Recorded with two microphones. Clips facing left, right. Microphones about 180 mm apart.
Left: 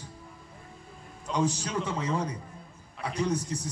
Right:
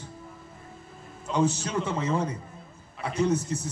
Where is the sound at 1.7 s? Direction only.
5° right (ahead or behind).